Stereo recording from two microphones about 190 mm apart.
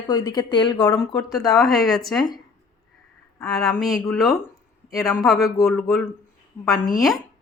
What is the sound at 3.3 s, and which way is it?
Speech, centre (ahead or behind).